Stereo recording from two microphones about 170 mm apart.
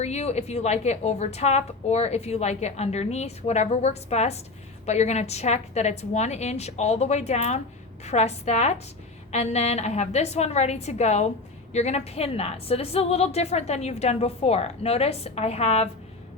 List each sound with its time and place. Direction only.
0.0 s a woman's voice: 40° left (ahead or behind)